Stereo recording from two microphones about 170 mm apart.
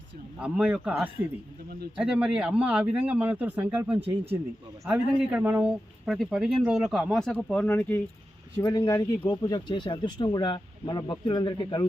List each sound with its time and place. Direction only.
0.3 s speech: 5° right (ahead or behind); by 11.9 s 25° left (ahead or behind)